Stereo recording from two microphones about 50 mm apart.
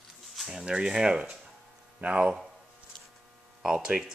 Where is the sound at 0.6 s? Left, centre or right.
Centre.